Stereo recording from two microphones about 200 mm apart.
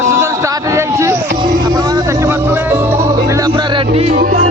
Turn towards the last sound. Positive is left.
turn(degrees=-45)  # may be behind; listen again after turning